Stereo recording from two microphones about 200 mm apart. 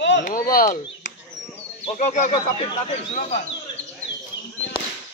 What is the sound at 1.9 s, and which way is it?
Speech, 35° left (ahead or behind).